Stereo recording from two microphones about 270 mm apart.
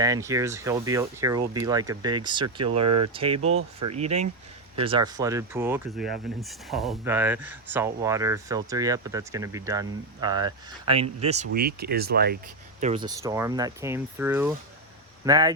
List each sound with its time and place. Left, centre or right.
0.0 s speech: centre
2.8 s speech: right
3.1 s speech: centre; by 12.4 s right
12.8 s speech: centre